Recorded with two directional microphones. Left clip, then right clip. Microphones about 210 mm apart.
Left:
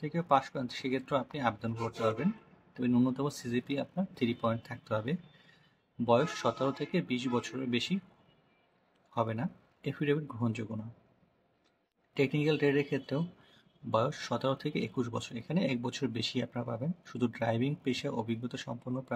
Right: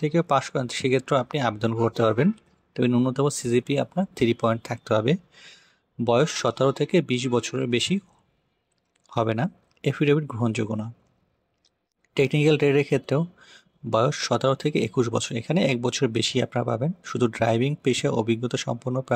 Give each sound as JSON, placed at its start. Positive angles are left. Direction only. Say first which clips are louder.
{"t": 0.0, "sound": "speech", "louder": "right 7 dB", "side_deg": -35}
{"t": 9.1, "sound": "speech", "louder": "right 9 dB", "side_deg": -35}
{"t": 12.1, "sound": "speech", "louder": "right 9 dB", "side_deg": -35}